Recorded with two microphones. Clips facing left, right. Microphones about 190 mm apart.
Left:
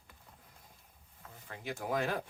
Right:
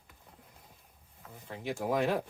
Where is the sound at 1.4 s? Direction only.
25° right (ahead or behind).